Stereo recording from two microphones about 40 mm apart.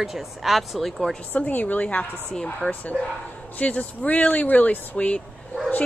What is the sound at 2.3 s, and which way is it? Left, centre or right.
Speech, centre.